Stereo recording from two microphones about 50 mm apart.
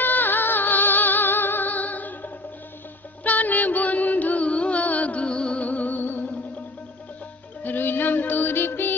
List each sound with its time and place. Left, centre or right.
0.0 s music: left; by 5.7 s centre
5.7 s music: left
7.6 s music: left